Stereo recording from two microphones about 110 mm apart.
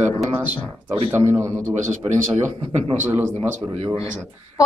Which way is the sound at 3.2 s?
65° right (ahead or behind).